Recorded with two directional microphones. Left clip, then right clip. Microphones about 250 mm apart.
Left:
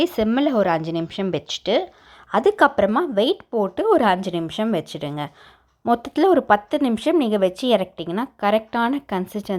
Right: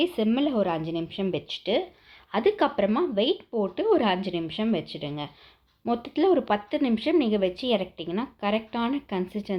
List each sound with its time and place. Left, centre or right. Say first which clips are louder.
0.0 s speech: left 5 dB; left